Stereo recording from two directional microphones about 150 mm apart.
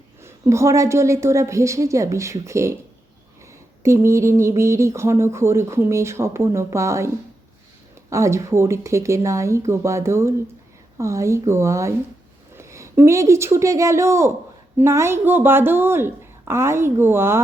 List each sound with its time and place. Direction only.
0.2 s speech: 20° right (ahead or behind)
3.8 s speech: 20° right (ahead or behind)
8.1 s speech: 20° right (ahead or behind)